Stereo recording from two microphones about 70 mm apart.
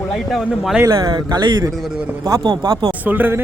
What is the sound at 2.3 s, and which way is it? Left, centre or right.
Speech, right.